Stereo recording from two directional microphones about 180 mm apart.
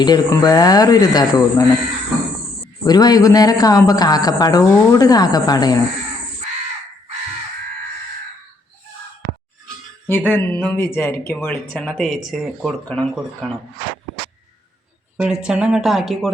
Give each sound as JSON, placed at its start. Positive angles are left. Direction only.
{"t": 0.0, "sound": "a man's voice", "side_deg": 20}
{"t": 2.8, "sound": "a man's voice", "side_deg": 20}
{"t": 10.1, "sound": "speech", "side_deg": 10}
{"t": 15.2, "sound": "speech", "side_deg": -5}